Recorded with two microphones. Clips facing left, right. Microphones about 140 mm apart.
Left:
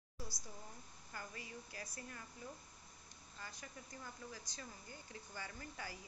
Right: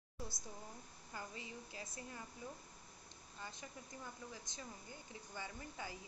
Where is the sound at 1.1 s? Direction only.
20° right (ahead or behind).